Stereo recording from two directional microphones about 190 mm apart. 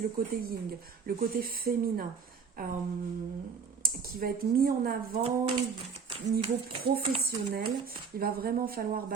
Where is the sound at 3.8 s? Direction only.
50° right (ahead or behind).